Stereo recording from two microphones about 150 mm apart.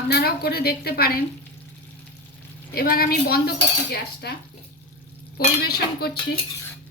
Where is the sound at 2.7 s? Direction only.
80° left.